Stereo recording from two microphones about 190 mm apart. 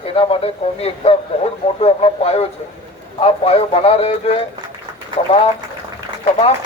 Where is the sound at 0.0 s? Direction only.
30° left (ahead or behind).